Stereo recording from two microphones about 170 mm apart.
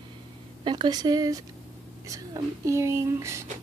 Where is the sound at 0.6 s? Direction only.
25° right (ahead or behind).